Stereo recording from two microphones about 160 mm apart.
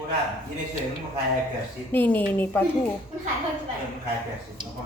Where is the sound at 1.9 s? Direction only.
10° left (ahead or behind).